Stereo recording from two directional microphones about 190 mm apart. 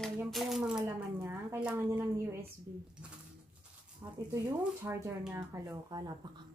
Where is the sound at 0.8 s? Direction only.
15° right (ahead or behind).